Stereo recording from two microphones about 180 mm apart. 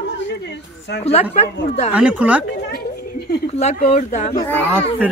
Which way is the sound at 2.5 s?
65° left (ahead or behind).